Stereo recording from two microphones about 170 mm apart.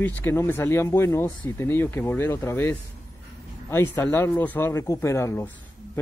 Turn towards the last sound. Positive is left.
turn(degrees=15)  # may be behind; listen again after turning